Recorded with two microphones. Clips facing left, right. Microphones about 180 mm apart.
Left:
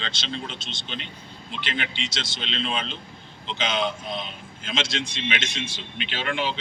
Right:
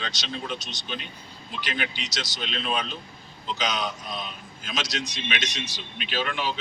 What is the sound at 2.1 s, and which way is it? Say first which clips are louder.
A man's voice: even; 25° left (ahead or behind).